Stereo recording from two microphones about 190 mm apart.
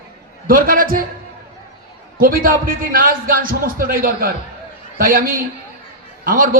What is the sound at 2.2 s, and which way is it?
A man's voice, 50° right (ahead or behind).